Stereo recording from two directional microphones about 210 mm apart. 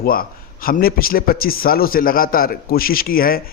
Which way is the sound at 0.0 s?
45° left (ahead or behind).